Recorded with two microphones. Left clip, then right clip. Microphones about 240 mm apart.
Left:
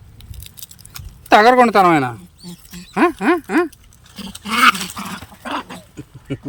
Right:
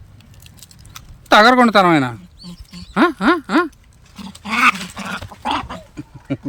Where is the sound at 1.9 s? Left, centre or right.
Centre.